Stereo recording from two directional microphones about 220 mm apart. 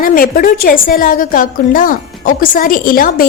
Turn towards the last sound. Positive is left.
turn(degrees=40)  # may be behind; listen again after turning